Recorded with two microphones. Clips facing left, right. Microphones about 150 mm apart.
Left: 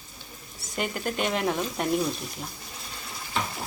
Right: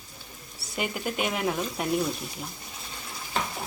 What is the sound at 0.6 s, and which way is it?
Speech, 5° right (ahead or behind).